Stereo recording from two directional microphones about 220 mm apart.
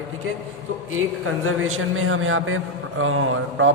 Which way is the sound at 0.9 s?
70° right (ahead or behind).